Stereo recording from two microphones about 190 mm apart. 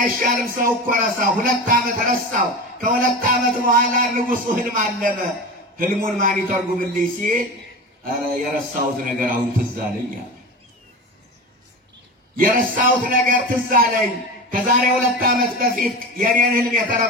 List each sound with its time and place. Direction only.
0.0 s speech: 50° right (ahead or behind)
12.4 s speech: 45° right (ahead or behind)